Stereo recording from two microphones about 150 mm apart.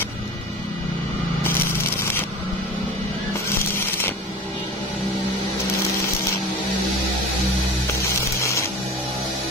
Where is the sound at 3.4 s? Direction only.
15° left (ahead or behind).